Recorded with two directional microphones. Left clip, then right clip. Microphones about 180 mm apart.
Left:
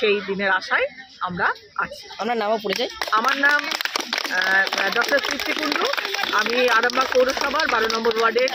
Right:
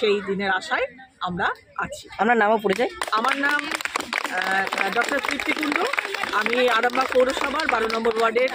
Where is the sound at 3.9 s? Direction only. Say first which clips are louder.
Left 1 dB; 55° left (ahead or behind).